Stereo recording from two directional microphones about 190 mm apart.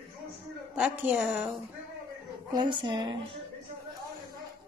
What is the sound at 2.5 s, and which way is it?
Speech, 25° right (ahead or behind).